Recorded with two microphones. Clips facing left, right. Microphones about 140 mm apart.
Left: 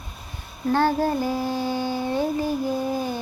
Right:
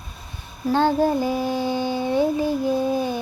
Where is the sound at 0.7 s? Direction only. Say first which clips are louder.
Right 2 dB; 20° right (ahead or behind).